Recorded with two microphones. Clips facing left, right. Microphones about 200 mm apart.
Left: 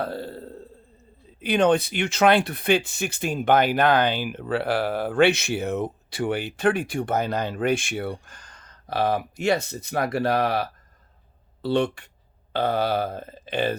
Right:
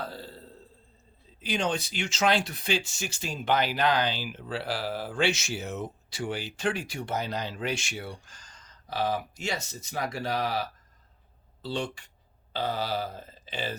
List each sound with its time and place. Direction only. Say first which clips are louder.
0.0 s burping: left 9 dB; 60° left (ahead or behind)
1.4 s speech: left 10 dB; 60° left (ahead or behind)